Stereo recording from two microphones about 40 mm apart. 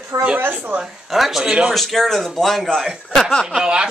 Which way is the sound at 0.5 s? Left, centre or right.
Right.